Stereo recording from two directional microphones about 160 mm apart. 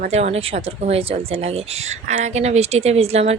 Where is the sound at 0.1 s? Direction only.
40° right (ahead or behind).